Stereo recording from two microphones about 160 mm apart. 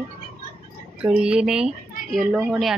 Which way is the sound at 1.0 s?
5° right (ahead or behind).